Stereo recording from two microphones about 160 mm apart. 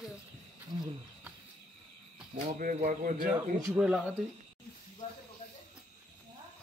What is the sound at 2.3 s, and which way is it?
Speech, 55° right (ahead or behind).